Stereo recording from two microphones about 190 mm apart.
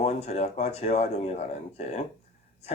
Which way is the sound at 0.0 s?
35° left (ahead or behind).